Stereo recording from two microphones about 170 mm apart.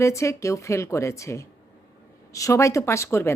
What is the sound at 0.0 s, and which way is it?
Speech, 15° left (ahead or behind).